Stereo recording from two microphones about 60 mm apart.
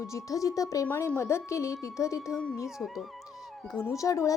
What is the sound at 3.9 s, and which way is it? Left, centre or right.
Speech, left.